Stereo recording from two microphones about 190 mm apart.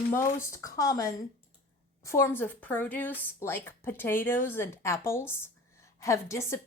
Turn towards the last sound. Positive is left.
turn(degrees=15)  # may be behind; listen again after turning